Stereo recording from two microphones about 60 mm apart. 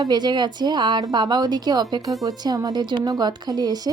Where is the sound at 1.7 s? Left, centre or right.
Right.